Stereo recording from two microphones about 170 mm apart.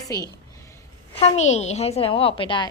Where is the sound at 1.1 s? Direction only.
40° left (ahead or behind).